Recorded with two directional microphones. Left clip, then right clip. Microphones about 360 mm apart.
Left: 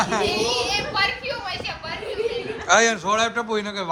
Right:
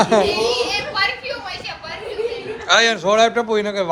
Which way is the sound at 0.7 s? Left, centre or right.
Left.